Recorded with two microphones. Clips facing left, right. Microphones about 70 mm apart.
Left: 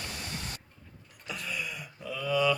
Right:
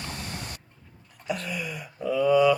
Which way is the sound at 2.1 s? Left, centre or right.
Centre.